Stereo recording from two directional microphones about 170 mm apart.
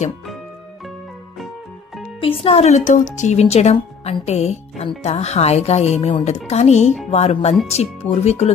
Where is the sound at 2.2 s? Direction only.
35° left (ahead or behind).